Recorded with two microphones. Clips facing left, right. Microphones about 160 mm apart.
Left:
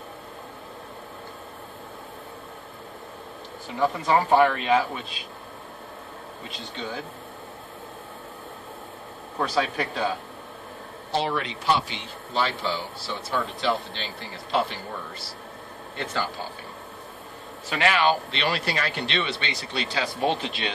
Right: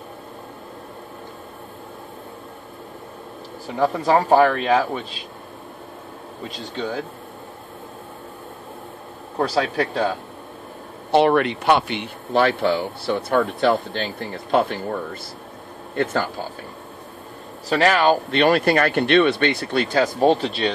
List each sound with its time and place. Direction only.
3.8 s speech: 40° right (ahead or behind)
9.4 s speech: 40° right (ahead or behind)
11.1 s speech: 60° right (ahead or behind)
17.6 s speech: 40° right (ahead or behind)